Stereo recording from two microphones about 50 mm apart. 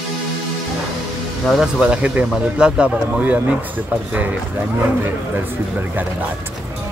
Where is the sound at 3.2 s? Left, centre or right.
Right.